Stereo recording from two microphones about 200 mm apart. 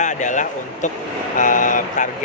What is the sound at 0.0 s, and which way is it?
Speech, 40° left (ahead or behind).